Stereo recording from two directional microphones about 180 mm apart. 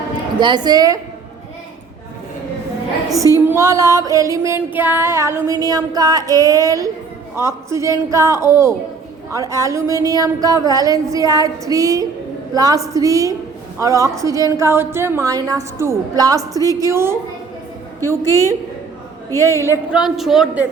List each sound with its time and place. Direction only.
0.3 s a woman's voice: 25° right (ahead or behind)
3.4 s female singing: 15° right (ahead or behind)
9.3 s a woman's voice: 15° right (ahead or behind)
13.7 s female singing: 15° right (ahead or behind)
19.9 s a woman's voice: 5° right (ahead or behind)